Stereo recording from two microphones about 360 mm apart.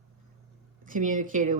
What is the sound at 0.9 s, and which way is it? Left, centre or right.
Speech, right.